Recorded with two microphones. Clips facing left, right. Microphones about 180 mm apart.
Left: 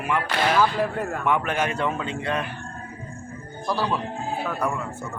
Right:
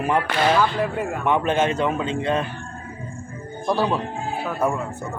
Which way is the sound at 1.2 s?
25° right (ahead or behind).